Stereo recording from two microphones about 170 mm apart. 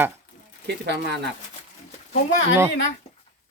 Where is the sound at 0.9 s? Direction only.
85° right.